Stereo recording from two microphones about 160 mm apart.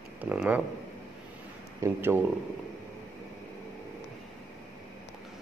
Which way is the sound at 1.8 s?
15° right (ahead or behind).